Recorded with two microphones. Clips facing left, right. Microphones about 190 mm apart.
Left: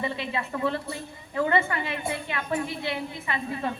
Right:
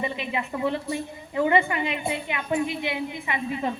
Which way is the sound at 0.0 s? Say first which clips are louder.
Right 1 dB; 15° right (ahead or behind).